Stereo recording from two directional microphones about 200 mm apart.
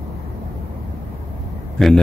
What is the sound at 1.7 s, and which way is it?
Speech, 5° left (ahead or behind).